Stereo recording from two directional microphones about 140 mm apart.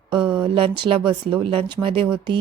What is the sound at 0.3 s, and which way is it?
Speech, 40° right (ahead or behind).